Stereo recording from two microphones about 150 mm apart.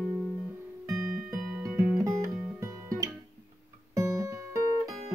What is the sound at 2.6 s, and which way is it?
Music, 20° right (ahead or behind).